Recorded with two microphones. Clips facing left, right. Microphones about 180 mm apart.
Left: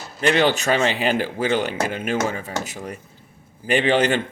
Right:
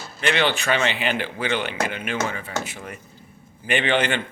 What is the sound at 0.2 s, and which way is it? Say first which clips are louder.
Speech: left 4 dB; 40° left (ahead or behind).